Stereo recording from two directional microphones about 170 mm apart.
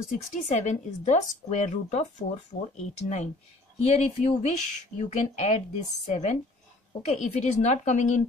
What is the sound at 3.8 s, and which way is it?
Speech, 40° left (ahead or behind).